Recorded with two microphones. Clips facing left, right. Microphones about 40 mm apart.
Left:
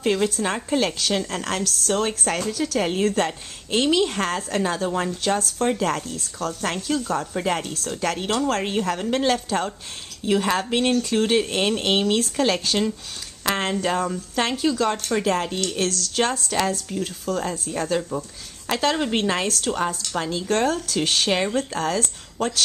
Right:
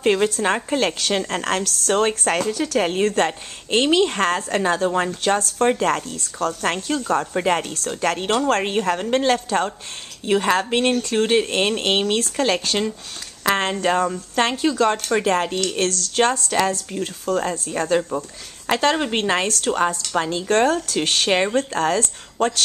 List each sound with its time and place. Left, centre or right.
0.0 s speech: right
7.1 s speech: right